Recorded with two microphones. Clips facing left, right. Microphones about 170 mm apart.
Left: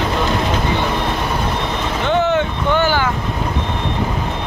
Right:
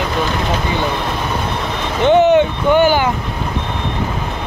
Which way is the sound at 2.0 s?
15° right (ahead or behind).